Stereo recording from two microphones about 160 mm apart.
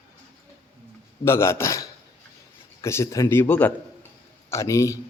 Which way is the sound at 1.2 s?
15° left (ahead or behind).